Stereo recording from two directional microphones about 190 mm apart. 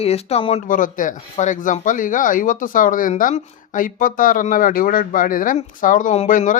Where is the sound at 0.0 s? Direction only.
35° left (ahead or behind).